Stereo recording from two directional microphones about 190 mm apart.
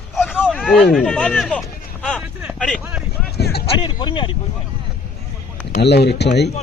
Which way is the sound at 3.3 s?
60° left (ahead or behind).